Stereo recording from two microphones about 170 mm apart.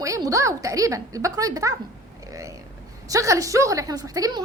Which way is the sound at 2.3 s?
20° right (ahead or behind).